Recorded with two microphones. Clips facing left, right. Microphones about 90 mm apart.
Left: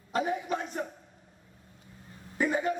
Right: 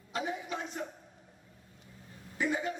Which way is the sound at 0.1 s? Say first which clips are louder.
Left 6 dB; 45° left (ahead or behind).